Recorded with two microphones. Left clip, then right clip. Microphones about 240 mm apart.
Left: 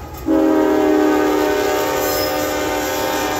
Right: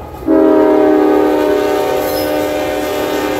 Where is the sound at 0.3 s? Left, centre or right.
Left.